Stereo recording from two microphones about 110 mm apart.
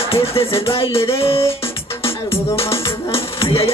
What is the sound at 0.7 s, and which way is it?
Music, 60° left (ahead or behind).